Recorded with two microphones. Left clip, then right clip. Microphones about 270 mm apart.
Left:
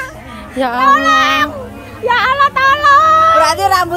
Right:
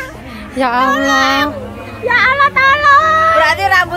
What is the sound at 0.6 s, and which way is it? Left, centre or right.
Speech, centre.